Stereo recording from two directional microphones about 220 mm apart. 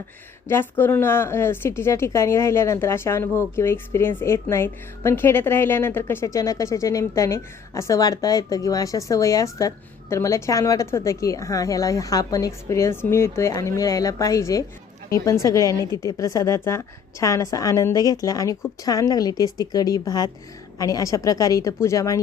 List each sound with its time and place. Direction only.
0.4 s a woman's voice: 10° left (ahead or behind)
15.8 s a woman's voice: 20° right (ahead or behind)
16.0 s a woman's voice: 15° left (ahead or behind)